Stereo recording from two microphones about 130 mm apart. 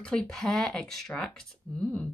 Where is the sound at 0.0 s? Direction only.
5° left (ahead or behind).